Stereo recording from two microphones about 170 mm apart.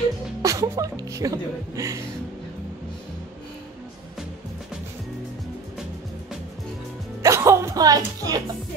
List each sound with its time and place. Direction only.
0.4 s speech: 20° right (ahead or behind)
7.2 s music: 15° right (ahead or behind)